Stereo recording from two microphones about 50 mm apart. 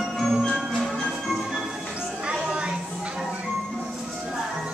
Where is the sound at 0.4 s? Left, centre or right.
Centre.